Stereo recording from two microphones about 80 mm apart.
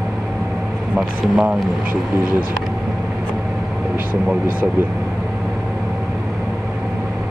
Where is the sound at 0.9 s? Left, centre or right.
Centre.